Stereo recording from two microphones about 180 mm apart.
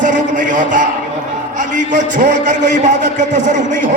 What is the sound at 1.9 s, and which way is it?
Speech, 45° right (ahead or behind).